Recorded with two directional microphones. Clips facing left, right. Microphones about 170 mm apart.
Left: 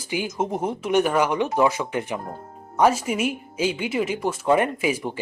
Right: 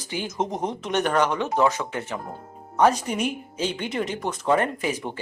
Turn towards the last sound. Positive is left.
turn(degrees=10)  # may be behind; listen again after turning